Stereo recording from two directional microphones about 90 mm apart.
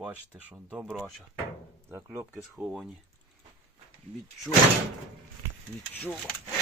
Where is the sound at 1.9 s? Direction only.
30° right (ahead or behind).